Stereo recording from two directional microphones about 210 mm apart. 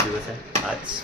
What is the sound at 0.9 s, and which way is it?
Speech, 20° right (ahead or behind).